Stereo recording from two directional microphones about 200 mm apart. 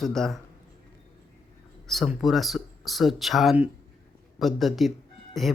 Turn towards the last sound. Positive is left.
turn(degrees=0)  # may be behind; listen again after turning